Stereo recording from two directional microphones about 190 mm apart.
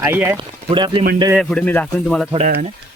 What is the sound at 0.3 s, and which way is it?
Speech, 25° right (ahead or behind).